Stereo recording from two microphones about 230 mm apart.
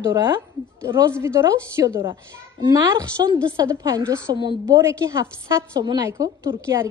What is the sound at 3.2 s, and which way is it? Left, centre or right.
A woman's voice, centre.